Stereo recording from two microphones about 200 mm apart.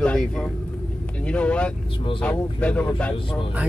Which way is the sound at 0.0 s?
5° left (ahead or behind).